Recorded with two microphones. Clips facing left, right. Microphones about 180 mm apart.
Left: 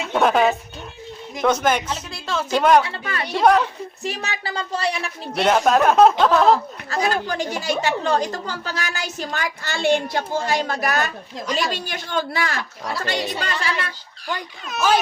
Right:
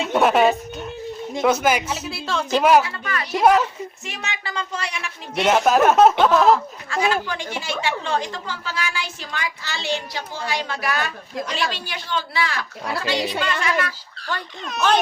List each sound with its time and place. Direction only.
0.0 s a woman's voice: 5° right (ahead or behind)
2.8 s speech: 30° left (ahead or behind)
3.4 s speech: 5° right (ahead or behind)
4.0 s a woman's voice: 35° left (ahead or behind)
5.4 s speech: 5° right (ahead or behind)
6.5 s a woman's voice: 40° left (ahead or behind)
14.7 s speech: 5° left (ahead or behind)